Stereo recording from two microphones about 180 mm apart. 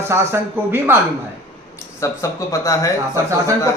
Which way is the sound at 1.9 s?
15° left (ahead or behind).